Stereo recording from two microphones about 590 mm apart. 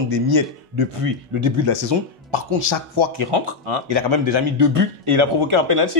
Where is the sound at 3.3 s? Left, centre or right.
Right.